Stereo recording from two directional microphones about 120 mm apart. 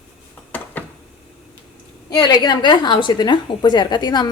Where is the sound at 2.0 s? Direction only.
35° left (ahead or behind).